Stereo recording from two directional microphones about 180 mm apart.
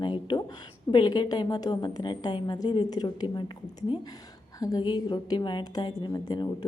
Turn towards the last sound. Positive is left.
turn(degrees=25)  # may be behind; listen again after turning